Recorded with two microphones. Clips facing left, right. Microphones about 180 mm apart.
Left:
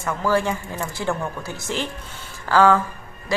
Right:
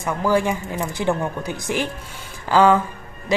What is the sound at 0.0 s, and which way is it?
Speech, 15° right (ahead or behind).